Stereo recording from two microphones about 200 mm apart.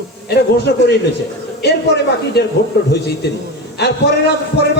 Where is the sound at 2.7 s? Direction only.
55° left (ahead or behind).